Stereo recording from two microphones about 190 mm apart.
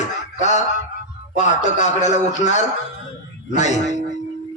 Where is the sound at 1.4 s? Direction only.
40° left (ahead or behind).